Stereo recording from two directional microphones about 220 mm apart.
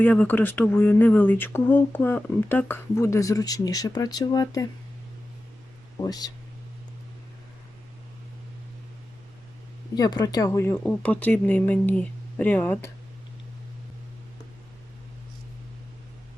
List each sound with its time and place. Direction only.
0.0 s speech: 5° left (ahead or behind)
6.0 s speech: 15° left (ahead or behind)
9.9 s speech: 20° left (ahead or behind)